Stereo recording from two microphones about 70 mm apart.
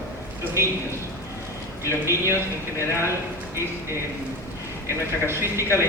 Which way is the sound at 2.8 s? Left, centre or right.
Left.